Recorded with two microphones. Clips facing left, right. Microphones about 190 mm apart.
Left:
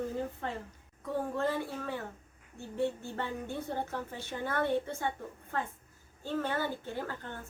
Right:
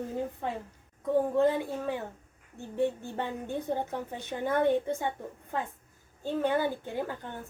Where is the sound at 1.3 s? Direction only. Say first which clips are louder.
Right 7 dB; 15° right (ahead or behind).